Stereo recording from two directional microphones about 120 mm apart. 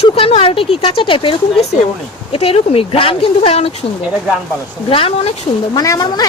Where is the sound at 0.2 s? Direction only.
55° left (ahead or behind).